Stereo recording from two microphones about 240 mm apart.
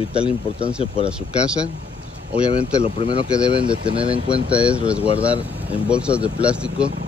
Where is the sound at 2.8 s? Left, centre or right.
Left.